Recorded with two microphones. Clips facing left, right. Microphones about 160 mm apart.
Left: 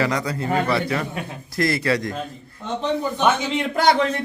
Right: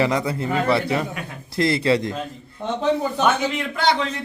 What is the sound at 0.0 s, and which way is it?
Speech, 25° right (ahead or behind).